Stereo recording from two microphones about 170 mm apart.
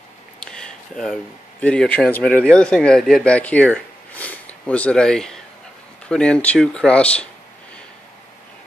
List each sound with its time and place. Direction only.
0.4 s speech: 5° left (ahead or behind)